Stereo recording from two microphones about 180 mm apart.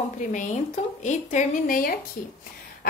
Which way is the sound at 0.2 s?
45° left (ahead or behind).